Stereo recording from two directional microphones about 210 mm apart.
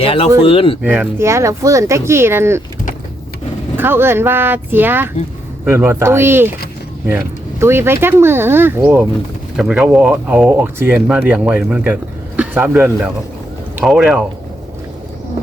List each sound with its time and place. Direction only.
0.0 s speech: 25° left (ahead or behind)
0.8 s speech: 10° right (ahead or behind)
3.8 s speech: 10° right (ahead or behind)
7.6 s a man's voice: 10° right (ahead or behind)